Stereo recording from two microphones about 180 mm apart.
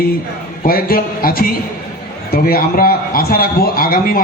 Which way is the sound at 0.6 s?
55° left (ahead or behind).